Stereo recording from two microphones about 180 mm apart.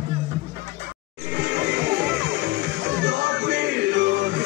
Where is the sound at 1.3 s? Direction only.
75° right (ahead or behind).